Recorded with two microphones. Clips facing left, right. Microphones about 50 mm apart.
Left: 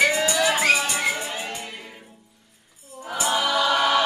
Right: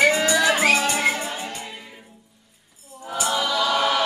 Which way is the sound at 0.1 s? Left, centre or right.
Right.